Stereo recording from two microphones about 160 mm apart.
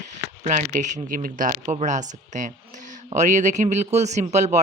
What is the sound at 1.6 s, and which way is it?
Speech, 45° right (ahead or behind).